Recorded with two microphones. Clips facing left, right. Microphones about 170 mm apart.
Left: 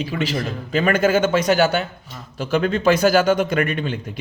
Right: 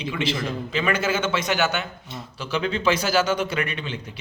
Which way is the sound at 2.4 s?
50° left (ahead or behind).